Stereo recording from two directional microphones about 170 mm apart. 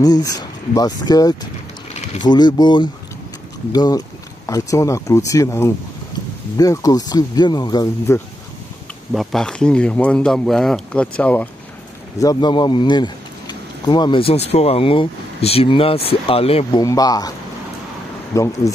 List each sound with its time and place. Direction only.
0.0 s speech: 20° left (ahead or behind)
9.1 s speech: centre (ahead or behind)
12.2 s speech: 25° left (ahead or behind)
16.8 s speech: 20° left (ahead or behind)
18.3 s speech: 20° left (ahead or behind)